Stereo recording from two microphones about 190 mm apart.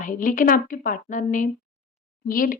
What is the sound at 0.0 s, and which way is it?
A woman's voice, 45° left (ahead or behind).